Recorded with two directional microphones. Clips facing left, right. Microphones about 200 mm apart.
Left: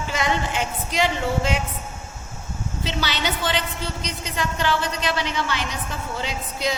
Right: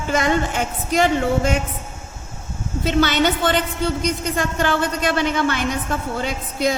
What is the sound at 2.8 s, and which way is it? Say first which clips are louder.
A woman's voice: right 10 dB; 50° right (ahead or behind).